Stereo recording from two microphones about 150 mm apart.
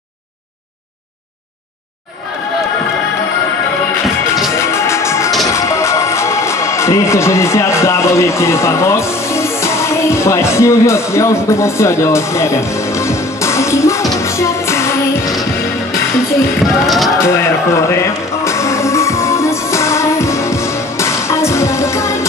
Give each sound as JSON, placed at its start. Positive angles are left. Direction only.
{"t": 4.6, "sound": "music", "side_deg": 20}
{"t": 16.6, "sound": "speech", "side_deg": 0}
{"t": 17.2, "sound": "music", "side_deg": 15}